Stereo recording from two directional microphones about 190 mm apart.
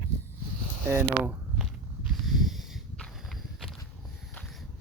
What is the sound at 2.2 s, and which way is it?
Walk, centre (ahead or behind).